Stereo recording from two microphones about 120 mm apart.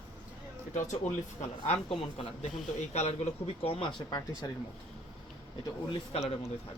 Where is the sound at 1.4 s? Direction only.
60° left (ahead or behind).